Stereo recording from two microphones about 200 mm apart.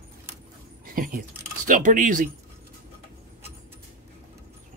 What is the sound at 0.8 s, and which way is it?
Keys jangling, 45° right (ahead or behind).